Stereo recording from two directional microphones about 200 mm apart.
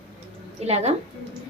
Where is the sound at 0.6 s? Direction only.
30° right (ahead or behind).